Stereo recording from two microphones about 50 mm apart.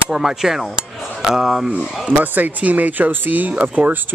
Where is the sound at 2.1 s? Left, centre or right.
Right.